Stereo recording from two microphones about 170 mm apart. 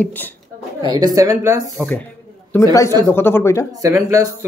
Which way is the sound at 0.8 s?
25° right (ahead or behind).